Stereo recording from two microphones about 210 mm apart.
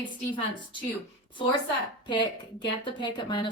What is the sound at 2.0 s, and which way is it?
Speech, 20° left (ahead or behind).